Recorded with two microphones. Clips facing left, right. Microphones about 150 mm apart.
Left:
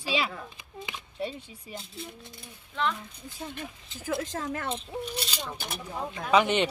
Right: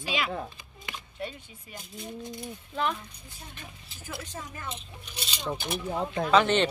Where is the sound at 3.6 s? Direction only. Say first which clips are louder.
Left 7 dB; 90° left.